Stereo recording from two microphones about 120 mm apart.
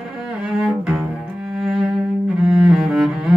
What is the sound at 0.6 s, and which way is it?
Cello, 5° right (ahead or behind).